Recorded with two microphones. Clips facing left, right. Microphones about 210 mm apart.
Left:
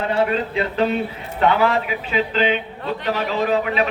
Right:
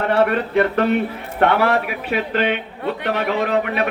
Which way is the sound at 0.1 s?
65° right (ahead or behind).